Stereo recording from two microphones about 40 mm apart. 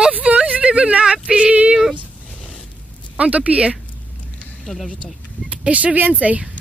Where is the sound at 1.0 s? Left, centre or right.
Right.